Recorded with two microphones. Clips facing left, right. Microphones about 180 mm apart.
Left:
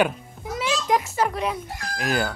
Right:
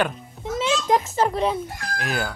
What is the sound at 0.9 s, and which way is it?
Speech, 25° right (ahead or behind).